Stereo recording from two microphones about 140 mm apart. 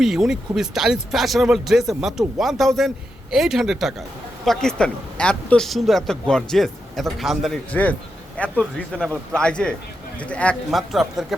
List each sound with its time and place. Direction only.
0.0 s speech: centre (ahead or behind)
7.7 s speech: 10° left (ahead or behind)